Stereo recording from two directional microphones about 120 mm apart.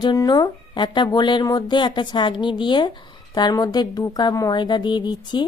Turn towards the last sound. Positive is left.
turn(degrees=40)  # may be behind; listen again after turning